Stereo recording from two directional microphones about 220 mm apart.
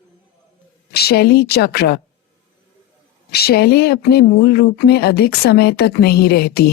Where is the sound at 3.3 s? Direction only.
45° left (ahead or behind).